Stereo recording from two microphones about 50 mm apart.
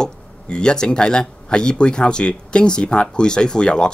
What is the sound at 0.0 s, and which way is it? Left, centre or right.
Speech, centre.